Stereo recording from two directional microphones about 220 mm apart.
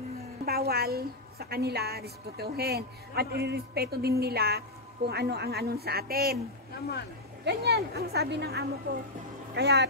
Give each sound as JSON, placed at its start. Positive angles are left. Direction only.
{"t": 0.5, "sound": "a woman's voice", "side_deg": -45}
{"t": 7.4, "sound": "a woman's voice", "side_deg": -45}